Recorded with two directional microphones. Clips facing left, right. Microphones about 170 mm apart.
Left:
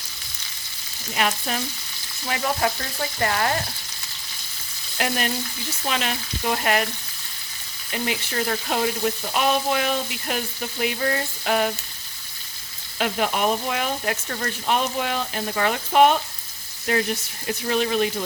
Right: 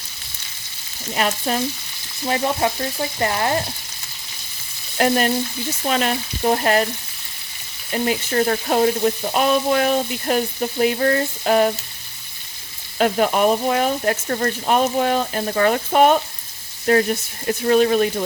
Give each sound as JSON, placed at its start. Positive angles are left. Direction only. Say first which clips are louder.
{"t": 1.1, "sound": "frying", "louder": "right 4 dB", "side_deg": -35}
{"t": 4.9, "sound": "frying", "louder": "right 8 dB", "side_deg": -40}
{"t": 7.9, "sound": "frying", "louder": "right 7 dB", "side_deg": -40}
{"t": 13.0, "sound": "speech", "louder": "right 6 dB", "side_deg": -45}